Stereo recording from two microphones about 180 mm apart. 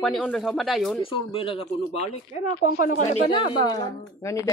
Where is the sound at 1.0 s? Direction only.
30° left (ahead or behind); by 2.9 s 50° left (ahead or behind).